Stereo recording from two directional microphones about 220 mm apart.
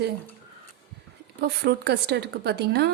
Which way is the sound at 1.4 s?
50° right (ahead or behind).